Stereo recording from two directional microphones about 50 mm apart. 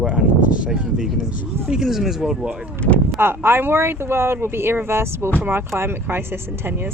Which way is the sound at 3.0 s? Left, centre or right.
Right.